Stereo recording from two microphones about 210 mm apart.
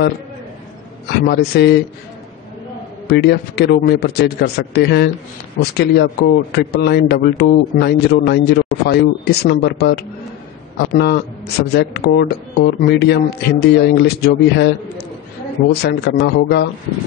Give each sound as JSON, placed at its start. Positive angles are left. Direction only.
{"t": 1.2, "sound": "speech", "side_deg": 50}
{"t": 3.1, "sound": "speech", "side_deg": 50}
{"t": 15.8, "sound": "speech", "side_deg": 55}